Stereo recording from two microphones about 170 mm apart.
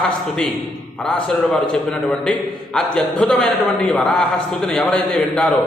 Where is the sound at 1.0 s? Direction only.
5° left (ahead or behind).